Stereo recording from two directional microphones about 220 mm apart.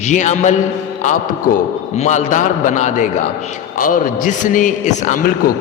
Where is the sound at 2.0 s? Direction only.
35° left (ahead or behind).